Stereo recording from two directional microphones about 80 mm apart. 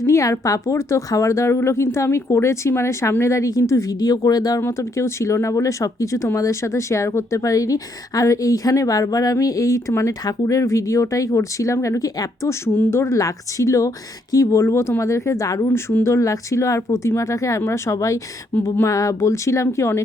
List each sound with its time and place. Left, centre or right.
0.0 s speech: left
4.6 s speech: left
15.7 s speech: left
16.1 s speech: left